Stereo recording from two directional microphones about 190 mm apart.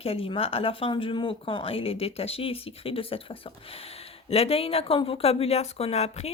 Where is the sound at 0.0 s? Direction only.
30° left (ahead or behind).